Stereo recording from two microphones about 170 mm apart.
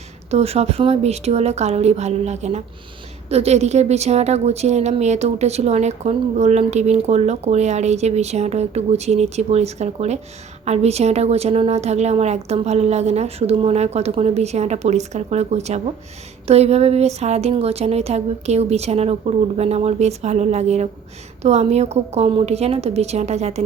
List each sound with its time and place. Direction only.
0.3 s a woman's voice: 40° right (ahead or behind)